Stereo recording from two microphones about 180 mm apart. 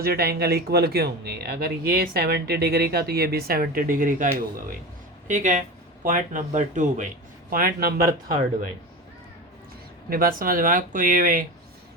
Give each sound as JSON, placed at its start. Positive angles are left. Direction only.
{"t": 0.0, "sound": "speech", "side_deg": -60}
{"t": 7.5, "sound": "speech", "side_deg": -55}
{"t": 10.1, "sound": "speech", "side_deg": -55}